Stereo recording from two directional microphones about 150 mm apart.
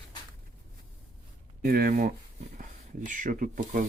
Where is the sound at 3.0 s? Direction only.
60° right (ahead or behind).